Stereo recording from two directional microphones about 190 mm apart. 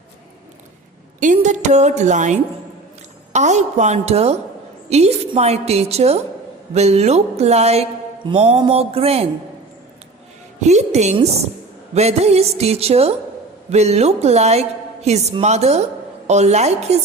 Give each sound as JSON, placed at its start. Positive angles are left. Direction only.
{"t": 1.2, "sound": "speech", "side_deg": -40}
{"t": 10.6, "sound": "speech", "side_deg": -35}